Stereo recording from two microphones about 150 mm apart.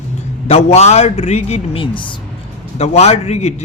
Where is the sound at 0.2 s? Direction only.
45° left (ahead or behind).